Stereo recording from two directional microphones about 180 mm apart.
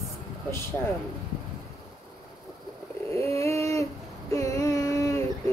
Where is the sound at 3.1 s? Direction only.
15° left (ahead or behind).